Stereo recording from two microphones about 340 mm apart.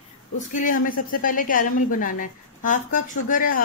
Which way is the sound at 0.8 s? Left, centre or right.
Left.